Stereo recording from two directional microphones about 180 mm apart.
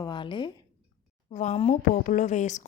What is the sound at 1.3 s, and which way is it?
A woman's voice, 40° left (ahead or behind).